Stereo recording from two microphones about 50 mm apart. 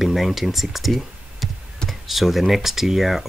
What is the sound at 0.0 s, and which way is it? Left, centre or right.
Speech, centre.